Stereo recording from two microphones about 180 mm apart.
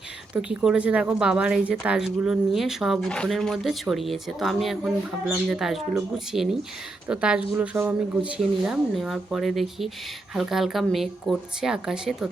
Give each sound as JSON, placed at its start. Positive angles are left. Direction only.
{"t": 0.3, "sound": "a woman's voice", "side_deg": -5}